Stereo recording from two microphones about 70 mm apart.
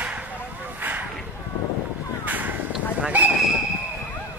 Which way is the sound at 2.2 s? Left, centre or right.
Right.